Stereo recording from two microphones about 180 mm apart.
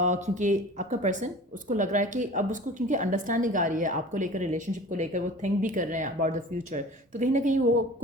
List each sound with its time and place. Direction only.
0.0 s speech: 40° right (ahead or behind)